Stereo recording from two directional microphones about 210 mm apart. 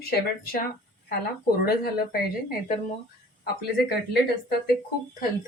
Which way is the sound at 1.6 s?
50° left (ahead or behind).